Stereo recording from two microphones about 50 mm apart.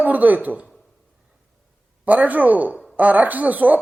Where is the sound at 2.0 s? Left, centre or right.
Right.